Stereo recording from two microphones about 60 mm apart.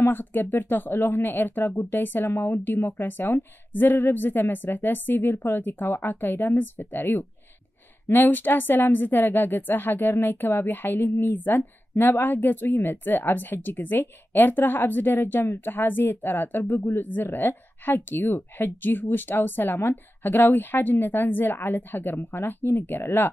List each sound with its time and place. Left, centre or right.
0.0 s speech: left